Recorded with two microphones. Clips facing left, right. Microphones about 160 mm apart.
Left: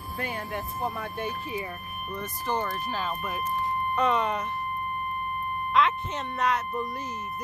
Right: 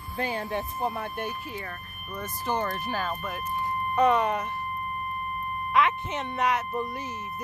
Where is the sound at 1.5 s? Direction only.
10° left (ahead or behind).